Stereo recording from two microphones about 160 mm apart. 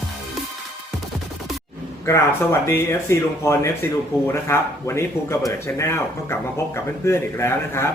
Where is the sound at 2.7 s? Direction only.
15° left (ahead or behind).